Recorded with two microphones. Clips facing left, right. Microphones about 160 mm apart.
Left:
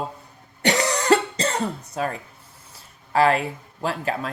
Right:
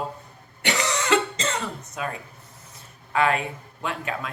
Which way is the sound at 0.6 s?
35° left (ahead or behind).